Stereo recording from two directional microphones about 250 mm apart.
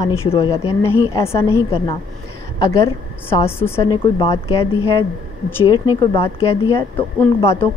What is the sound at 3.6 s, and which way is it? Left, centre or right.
Speech, centre.